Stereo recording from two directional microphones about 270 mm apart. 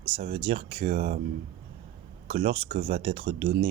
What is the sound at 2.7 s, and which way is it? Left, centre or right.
Speech, right.